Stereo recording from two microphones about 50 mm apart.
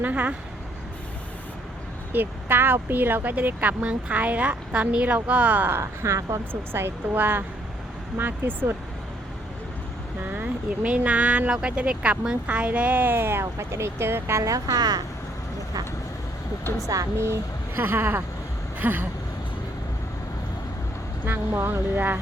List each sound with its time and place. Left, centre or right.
0.0 s speech: right
2.1 s speech: right
5.8 s speech: right
6.5 s speech: right
10.3 s speech: right
11.5 s speech: centre; by 14.4 s right
16.8 s a woman's voice: right
18.8 s a sound: right
21.2 s speech: right